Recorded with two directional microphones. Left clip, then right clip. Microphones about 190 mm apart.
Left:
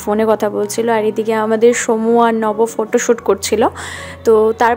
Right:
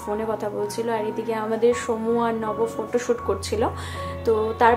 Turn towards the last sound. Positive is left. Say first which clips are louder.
# left 8 dB
turn(degrees=45)  # may be behind; listen again after turning